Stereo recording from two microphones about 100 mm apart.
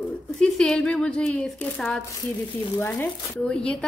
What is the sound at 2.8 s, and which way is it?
Speech, 20° left (ahead or behind).